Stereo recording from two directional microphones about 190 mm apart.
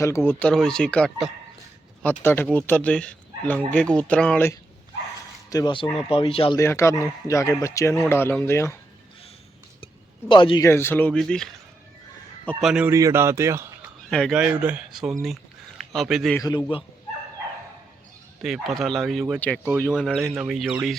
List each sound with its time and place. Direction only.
0.0 s speech: 15° left (ahead or behind)
5.5 s speech: 20° left (ahead or behind)
6.6 s speech: 15° left (ahead or behind)
9.8 s a sound: 25° left (ahead or behind)
10.7 s speech: 10° left (ahead or behind)
12.6 s speech: 5° right (ahead or behind)
12.9 s a man's voice: 15° right (ahead or behind)
14.1 s speech: centre (ahead or behind)
16.4 s speech: 20° left (ahead or behind)
18.4 s speech: centre (ahead or behind)